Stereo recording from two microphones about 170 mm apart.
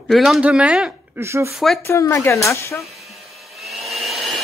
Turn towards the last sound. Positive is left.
turn(degrees=0)  # may be behind; listen again after turning